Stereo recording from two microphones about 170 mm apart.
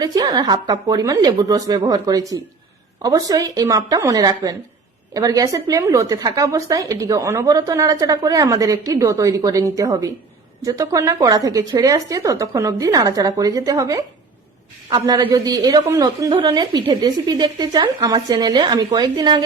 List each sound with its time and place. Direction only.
0.0 s a woman's voice: 20° right (ahead or behind)